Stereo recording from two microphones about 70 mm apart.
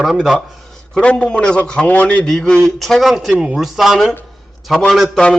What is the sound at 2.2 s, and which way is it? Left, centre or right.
A man's voice, centre.